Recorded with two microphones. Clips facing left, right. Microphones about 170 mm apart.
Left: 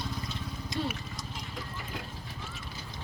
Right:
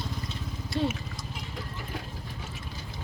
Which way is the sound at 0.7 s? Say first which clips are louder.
Right 6 dB; 20° left (ahead or behind).